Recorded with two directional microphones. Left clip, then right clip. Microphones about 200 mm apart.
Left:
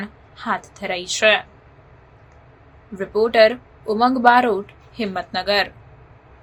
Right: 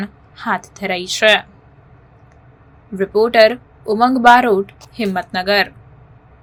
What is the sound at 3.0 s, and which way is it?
A woman's voice, 20° right (ahead or behind).